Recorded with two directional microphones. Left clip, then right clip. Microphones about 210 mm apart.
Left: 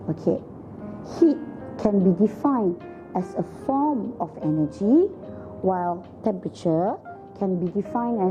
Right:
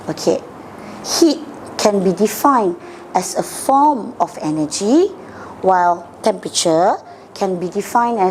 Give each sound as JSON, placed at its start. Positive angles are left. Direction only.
{"t": 0.0, "sound": "a woman's voice", "side_deg": -5}
{"t": 2.4, "sound": "a woman's voice", "side_deg": -20}
{"t": 3.1, "sound": "speech", "side_deg": -5}
{"t": 3.8, "sound": "a woman's voice", "side_deg": -30}
{"t": 4.4, "sound": "speech", "side_deg": -5}
{"t": 5.6, "sound": "a woman's voice", "side_deg": -20}
{"t": 6.2, "sound": "a woman's voice", "side_deg": -5}